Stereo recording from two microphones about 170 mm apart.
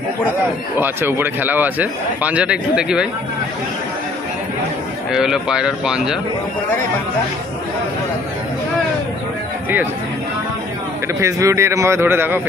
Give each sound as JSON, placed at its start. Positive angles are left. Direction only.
{"t": 0.7, "sound": "speech", "side_deg": -10}
{"t": 5.1, "sound": "speech", "side_deg": -5}
{"t": 11.1, "sound": "speech", "side_deg": -20}